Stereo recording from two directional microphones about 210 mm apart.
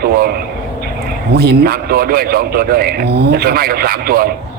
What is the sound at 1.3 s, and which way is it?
Speech, 50° right (ahead or behind).